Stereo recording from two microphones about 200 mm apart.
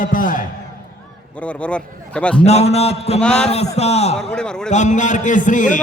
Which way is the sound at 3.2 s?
5° left (ahead or behind).